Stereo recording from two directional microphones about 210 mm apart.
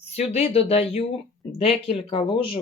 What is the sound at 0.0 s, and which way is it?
Speech, 30° left (ahead or behind).